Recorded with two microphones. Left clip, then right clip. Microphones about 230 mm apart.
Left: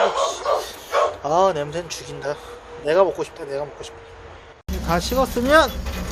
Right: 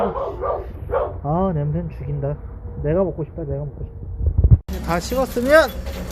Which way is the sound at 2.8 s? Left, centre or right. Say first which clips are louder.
Left 3 dB; centre.